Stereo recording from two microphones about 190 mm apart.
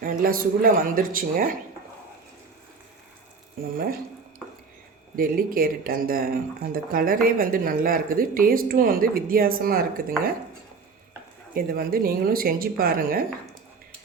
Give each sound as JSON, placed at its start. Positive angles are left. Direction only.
{"t": 0.0, "sound": "speech", "side_deg": -45}
{"t": 5.1, "sound": "speech", "side_deg": -50}
{"t": 11.5, "sound": "speech", "side_deg": -50}